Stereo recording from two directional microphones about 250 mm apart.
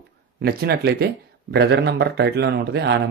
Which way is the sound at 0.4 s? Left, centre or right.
Right.